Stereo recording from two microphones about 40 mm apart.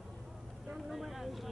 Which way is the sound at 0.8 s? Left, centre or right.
Centre.